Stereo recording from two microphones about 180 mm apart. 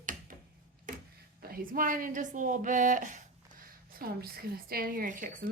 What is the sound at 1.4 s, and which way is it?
A woman's voice, 55° right (ahead or behind).